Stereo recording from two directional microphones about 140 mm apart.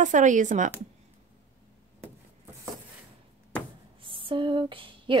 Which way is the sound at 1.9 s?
20° right (ahead or behind).